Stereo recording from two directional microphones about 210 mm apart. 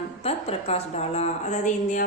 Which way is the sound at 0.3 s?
30° left (ahead or behind).